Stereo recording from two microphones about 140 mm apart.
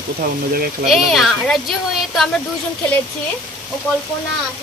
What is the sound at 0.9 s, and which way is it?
Speech, centre (ahead or behind).